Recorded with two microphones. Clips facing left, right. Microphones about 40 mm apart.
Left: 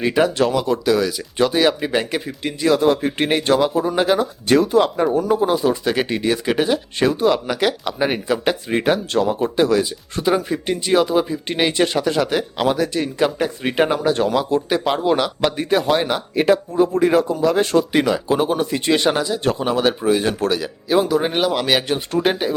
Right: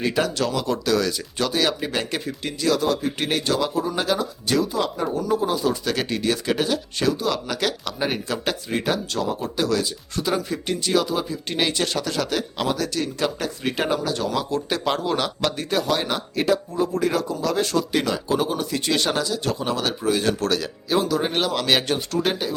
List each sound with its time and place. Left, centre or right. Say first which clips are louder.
0.0 s speech: left 6 dB; left
4.4 s speech: left 8 dB; left
5.4 s speech: left 5 dB; left
14.3 s speech: left 6 dB; centre
22.1 s speech: left 7 dB; left